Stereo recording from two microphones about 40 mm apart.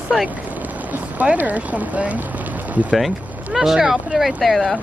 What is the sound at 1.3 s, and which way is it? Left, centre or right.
Speech, right.